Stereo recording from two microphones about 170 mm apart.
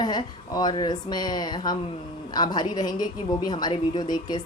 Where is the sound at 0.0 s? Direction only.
25° left (ahead or behind).